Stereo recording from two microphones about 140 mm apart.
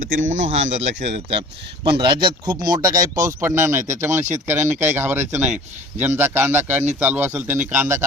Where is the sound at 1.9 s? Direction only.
35° right (ahead or behind); by 8.0 s 15° right (ahead or behind).